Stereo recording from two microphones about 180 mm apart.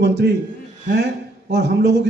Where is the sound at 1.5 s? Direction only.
70° right (ahead or behind).